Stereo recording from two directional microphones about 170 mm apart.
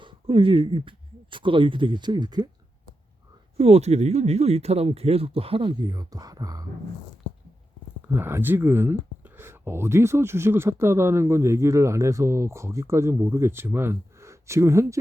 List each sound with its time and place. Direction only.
0.0 s speech: 30° right (ahead or behind)
3.6 s speech: 40° right (ahead or behind); by 6.7 s 20° right (ahead or behind)
8.0 s speech: 15° right (ahead or behind)